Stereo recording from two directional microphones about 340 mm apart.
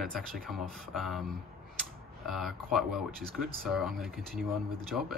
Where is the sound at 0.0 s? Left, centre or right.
Centre.